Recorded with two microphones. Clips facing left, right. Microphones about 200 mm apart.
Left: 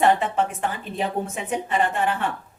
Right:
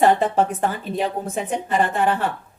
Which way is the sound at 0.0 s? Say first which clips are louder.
Right 3 dB; 40° right (ahead or behind).